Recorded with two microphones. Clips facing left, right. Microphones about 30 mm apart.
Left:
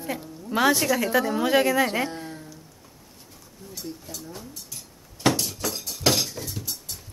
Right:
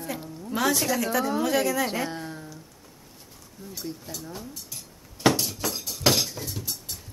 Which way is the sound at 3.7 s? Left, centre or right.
Centre.